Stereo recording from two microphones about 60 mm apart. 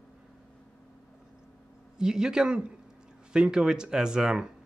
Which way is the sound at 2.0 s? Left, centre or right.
Centre.